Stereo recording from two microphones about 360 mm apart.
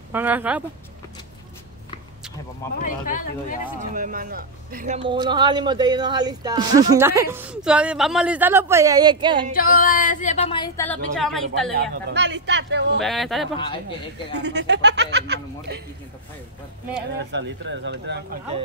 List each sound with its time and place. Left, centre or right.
0.1 s speech: centre
2.8 s speech: left
3.8 s speech: right
9.5 s speech: left; by 11.7 s centre
11.7 s speech: right
13.0 s speech: centre
14.3 s speech: right
17.2 s speech: right